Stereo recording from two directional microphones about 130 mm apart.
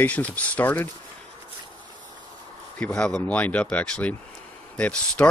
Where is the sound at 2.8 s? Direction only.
10° left (ahead or behind).